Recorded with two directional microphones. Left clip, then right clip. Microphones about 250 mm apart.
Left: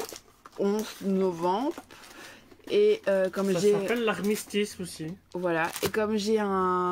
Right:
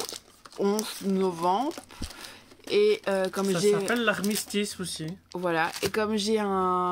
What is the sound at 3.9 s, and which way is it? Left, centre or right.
Speech, right.